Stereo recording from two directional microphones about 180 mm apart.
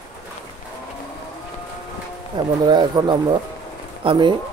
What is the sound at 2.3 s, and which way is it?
Speech, 25° right (ahead or behind).